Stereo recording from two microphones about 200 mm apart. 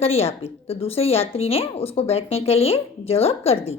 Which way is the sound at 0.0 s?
30° left (ahead or behind).